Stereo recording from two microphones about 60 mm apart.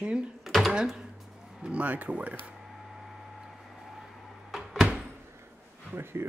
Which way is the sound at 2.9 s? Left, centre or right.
Centre.